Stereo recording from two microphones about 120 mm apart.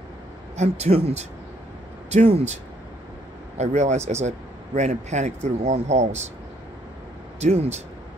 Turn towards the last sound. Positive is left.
turn(degrees=-65)  # may be behind; listen again after turning